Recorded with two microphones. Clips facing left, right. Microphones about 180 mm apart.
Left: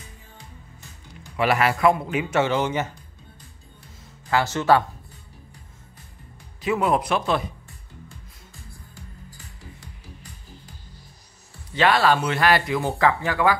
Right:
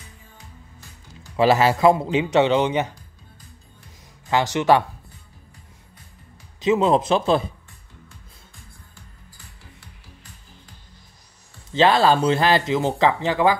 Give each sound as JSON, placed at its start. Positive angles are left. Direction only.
{"t": 1.3, "sound": "speech", "side_deg": -30}
{"t": 4.3, "sound": "speech", "side_deg": -15}
{"t": 6.6, "sound": "speech", "side_deg": -20}
{"t": 11.7, "sound": "speech", "side_deg": -25}